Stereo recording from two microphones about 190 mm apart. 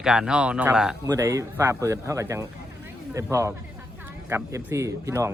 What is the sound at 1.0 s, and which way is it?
Speech, 15° right (ahead or behind).